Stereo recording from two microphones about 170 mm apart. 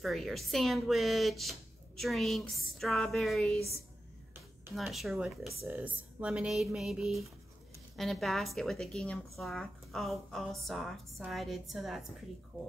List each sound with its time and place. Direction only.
0.0 s a woman's voice: centre (ahead or behind)
4.7 s a woman's voice: centre (ahead or behind)